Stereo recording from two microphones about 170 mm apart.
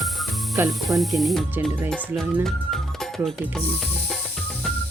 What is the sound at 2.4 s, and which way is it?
Music, centre (ahead or behind).